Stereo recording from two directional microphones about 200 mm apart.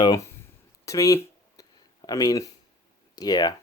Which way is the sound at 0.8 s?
15° left (ahead or behind).